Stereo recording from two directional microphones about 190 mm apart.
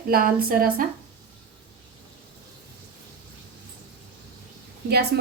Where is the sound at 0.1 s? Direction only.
50° right (ahead or behind).